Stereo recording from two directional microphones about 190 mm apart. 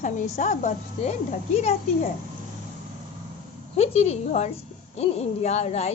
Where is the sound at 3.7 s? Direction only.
35° left (ahead or behind).